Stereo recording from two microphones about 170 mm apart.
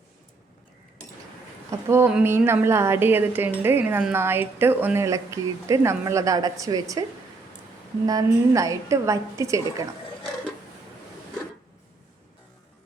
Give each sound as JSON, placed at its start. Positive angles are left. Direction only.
{"t": 1.9, "sound": "a woman's voice", "side_deg": -10}
{"t": 8.0, "sound": "a woman's voice", "side_deg": -20}